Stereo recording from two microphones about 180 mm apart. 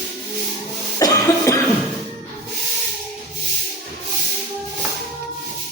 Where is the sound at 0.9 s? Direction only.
20° left (ahead or behind).